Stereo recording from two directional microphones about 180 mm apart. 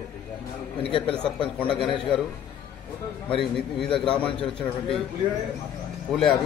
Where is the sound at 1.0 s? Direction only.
5° left (ahead or behind).